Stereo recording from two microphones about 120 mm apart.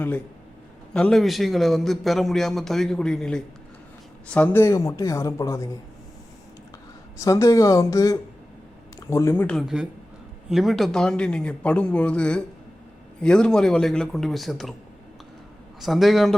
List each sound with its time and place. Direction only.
0.9 s a man's voice: 5° left (ahead or behind)
4.4 s speech: 20° left (ahead or behind)
7.3 s speech: 25° left (ahead or behind)
9.6 s a man's voice: 5° right (ahead or behind)
15.8 s a man's voice: centre (ahead or behind)